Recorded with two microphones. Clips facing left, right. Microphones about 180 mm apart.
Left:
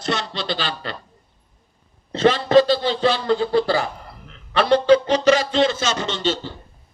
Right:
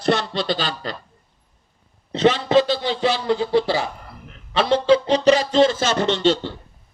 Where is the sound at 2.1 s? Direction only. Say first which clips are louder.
Left 1 dB; 20° right (ahead or behind); by 6.5 s 65° right (ahead or behind).